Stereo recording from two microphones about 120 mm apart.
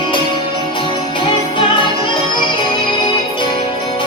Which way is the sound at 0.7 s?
45° left (ahead or behind).